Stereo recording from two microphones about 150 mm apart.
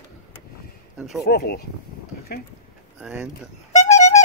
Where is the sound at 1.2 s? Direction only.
90° left.